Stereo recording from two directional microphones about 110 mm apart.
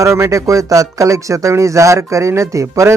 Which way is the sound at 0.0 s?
25° right (ahead or behind).